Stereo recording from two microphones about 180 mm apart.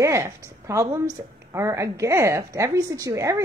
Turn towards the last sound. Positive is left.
turn(degrees=-20)  # may be behind; listen again after turning